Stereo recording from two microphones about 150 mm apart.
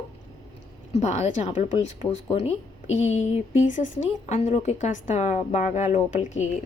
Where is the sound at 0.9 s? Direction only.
50° left (ahead or behind).